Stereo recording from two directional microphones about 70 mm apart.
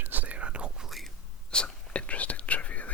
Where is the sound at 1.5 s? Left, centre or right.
Centre.